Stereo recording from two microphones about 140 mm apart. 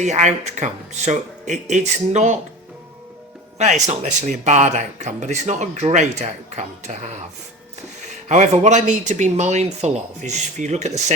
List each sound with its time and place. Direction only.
0.0 s speech: 55° right (ahead or behind)
3.6 s speech: 55° right (ahead or behind)
8.3 s speech: 55° right (ahead or behind)